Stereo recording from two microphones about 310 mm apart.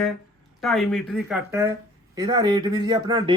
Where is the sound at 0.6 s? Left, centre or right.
Centre.